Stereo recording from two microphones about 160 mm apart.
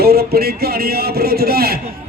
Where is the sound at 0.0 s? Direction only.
75° right (ahead or behind).